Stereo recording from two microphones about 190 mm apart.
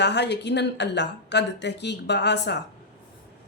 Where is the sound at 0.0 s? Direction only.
65° left (ahead or behind).